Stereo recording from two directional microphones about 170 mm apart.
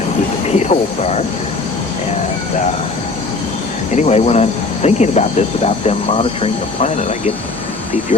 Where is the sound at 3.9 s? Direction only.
40° left (ahead or behind).